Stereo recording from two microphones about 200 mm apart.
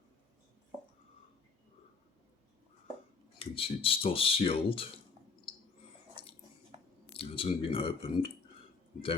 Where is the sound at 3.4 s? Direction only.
30° left (ahead or behind).